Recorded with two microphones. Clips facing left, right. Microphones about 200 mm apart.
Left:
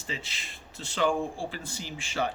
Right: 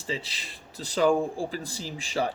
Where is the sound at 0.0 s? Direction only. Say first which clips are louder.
Right 5 dB; 30° right (ahead or behind).